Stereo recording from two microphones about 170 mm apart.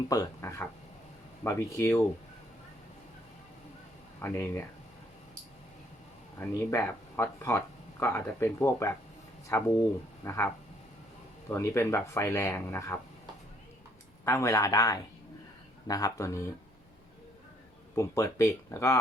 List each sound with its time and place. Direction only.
0.1 s speech: 20° left (ahead or behind)
4.2 s speech: 15° left (ahead or behind)
6.7 s speech: 15° left (ahead or behind)
14.3 s speech: 15° left (ahead or behind)
17.9 s speech: 15° left (ahead or behind)